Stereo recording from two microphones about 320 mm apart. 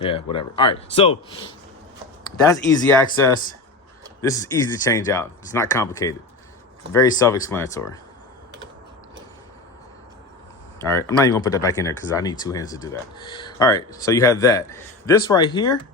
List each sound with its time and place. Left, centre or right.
0.0 s speech: centre
2.4 s speech: centre
4.2 s speech: centre
10.8 s speech: centre